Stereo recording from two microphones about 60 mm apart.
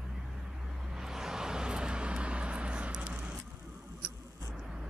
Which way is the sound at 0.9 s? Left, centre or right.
Centre.